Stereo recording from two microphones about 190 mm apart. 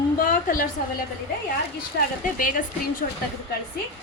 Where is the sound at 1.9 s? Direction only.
60° left (ahead or behind).